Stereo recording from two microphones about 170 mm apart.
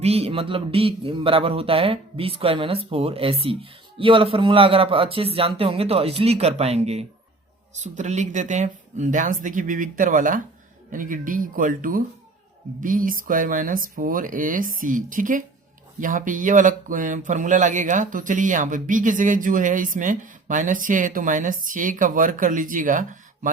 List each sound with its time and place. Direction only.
0.0 s a man's voice: 35° right (ahead or behind)